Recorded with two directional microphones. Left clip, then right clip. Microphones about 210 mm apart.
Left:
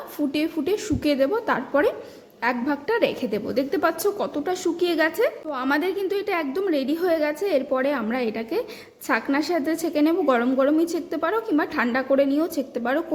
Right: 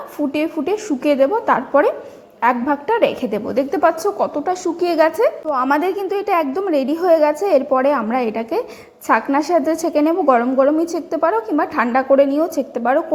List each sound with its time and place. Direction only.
0.3 s a woman's voice: 15° left (ahead or behind)